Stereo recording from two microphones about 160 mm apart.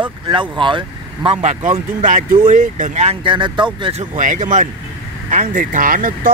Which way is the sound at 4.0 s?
50° right (ahead or behind).